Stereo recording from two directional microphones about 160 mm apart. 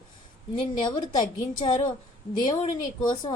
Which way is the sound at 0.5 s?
30° left (ahead or behind).